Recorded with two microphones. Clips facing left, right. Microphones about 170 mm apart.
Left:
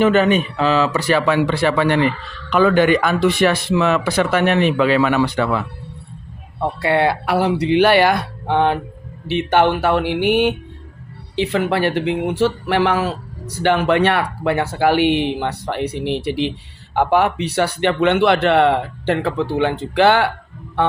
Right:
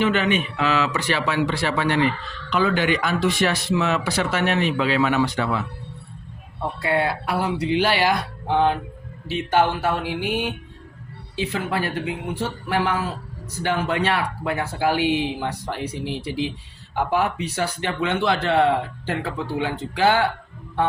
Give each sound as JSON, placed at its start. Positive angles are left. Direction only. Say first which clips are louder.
{"t": 0.0, "sound": "speech", "louder": "left 6 dB", "side_deg": 40}
{"t": 1.3, "sound": "speech", "louder": "left 6 dB", "side_deg": 55}
{"t": 6.8, "sound": "speech", "louder": "left 5 dB", "side_deg": 80}